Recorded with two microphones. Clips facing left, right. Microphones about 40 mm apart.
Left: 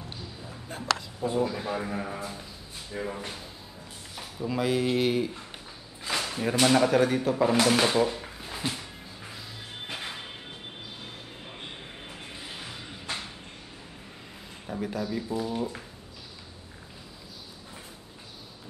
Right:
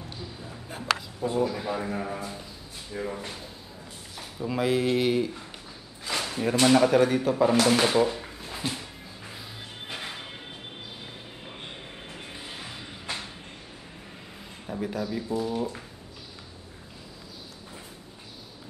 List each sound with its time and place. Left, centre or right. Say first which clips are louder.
0.5 s speech: right 1 dB; centre
9.8 s music: even; centre
11.4 s music: right 1 dB; centre
14.7 s a man's voice: right 1 dB; centre